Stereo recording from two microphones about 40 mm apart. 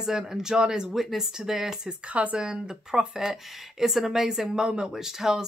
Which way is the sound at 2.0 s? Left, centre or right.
Right.